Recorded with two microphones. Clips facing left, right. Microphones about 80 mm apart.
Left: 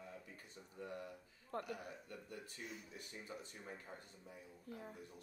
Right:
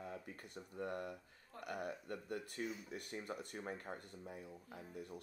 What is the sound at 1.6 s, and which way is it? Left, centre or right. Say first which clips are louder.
Speech: right 5 dB; right.